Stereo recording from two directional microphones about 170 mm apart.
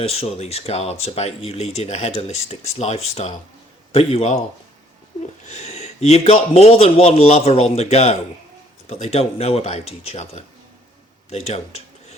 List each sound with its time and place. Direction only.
0.0 s speech: 35° left (ahead or behind)
5.5 s speech: 40° left (ahead or behind)